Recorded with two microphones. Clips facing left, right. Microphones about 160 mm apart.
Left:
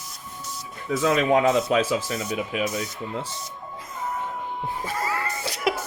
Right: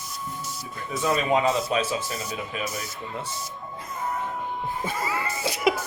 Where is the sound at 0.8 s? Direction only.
90° left.